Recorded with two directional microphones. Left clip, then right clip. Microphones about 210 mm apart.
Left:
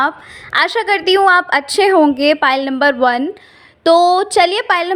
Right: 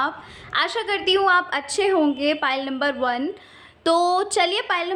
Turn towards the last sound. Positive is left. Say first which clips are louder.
# left 8 dB
turn(degrees=35)  # may be behind; listen again after turning